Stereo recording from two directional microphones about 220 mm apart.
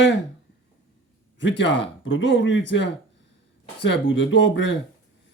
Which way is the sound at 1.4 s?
55° left (ahead or behind).